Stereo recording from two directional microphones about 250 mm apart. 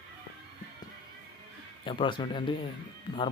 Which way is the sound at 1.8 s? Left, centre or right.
Centre.